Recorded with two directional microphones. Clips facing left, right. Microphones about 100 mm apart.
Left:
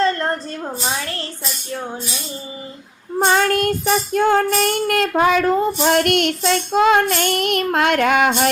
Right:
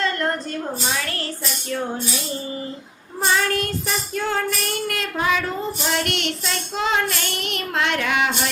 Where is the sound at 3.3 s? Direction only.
50° left (ahead or behind).